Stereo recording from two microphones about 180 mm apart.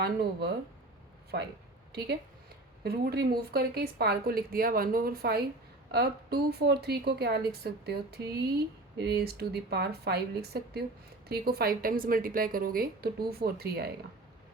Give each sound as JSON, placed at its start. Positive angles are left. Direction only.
{"t": 0.0, "sound": "a woman's voice", "side_deg": -60}
{"t": 1.9, "sound": "a woman's voice", "side_deg": -60}